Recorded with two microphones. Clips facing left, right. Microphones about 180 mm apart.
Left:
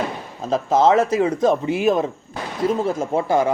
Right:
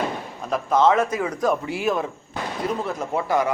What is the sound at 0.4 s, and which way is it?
Speech, 25° left (ahead or behind).